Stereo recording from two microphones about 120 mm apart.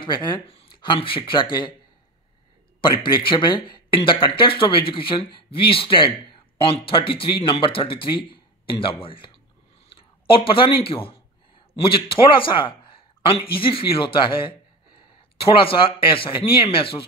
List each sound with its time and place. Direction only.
0.0 s speech: 40° left (ahead or behind)
3.0 s speech: 45° left (ahead or behind)